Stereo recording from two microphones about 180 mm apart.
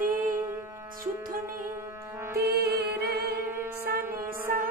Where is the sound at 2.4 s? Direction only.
60° right (ahead or behind).